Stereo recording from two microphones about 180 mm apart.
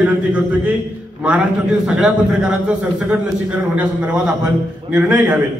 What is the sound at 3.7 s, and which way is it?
A man's voice, 5° right (ahead or behind).